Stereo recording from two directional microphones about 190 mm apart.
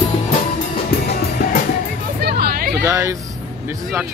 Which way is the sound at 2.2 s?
55° right (ahead or behind).